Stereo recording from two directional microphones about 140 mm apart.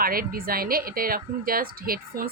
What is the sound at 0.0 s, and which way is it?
Speech, 90° right.